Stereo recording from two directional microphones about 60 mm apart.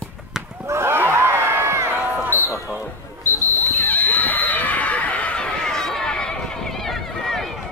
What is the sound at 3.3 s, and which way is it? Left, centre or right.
Basketball bounce, right.